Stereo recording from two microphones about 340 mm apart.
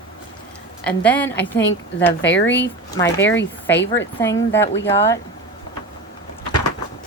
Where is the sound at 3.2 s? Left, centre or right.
Left.